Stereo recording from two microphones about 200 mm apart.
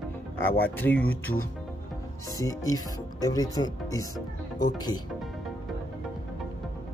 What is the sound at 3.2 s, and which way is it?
Speech, 20° left (ahead or behind).